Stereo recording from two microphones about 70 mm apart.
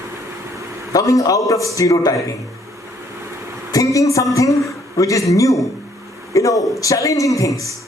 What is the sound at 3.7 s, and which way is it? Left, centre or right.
Speech, left.